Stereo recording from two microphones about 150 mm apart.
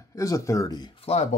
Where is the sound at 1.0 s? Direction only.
45° left (ahead or behind).